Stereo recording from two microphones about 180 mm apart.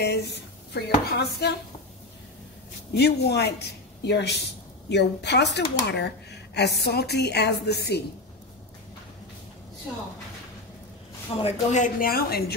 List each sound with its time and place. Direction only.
0.0 s speech: 70° left (ahead or behind)
2.9 s speech: 65° left (ahead or behind)
11.3 s speech: 30° left (ahead or behind)
11.7 s speech: 50° left (ahead or behind)